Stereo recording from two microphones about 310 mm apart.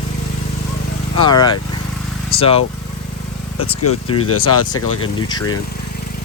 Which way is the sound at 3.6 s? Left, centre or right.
Left.